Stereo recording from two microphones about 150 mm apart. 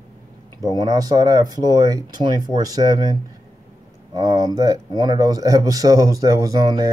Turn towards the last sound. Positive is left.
turn(degrees=-25)  # may be behind; listen again after turning